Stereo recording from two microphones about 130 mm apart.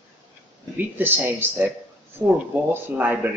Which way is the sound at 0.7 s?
15° right (ahead or behind).